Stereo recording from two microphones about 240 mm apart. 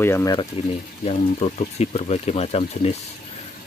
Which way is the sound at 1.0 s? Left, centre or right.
Left.